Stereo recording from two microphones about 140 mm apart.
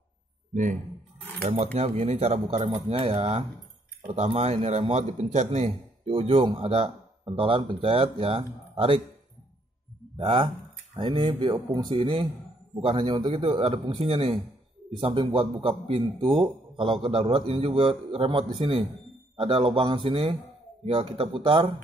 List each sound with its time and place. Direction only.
1.5 s a man's voice: 45° right (ahead or behind)
10.1 s a man's voice: 40° right (ahead or behind)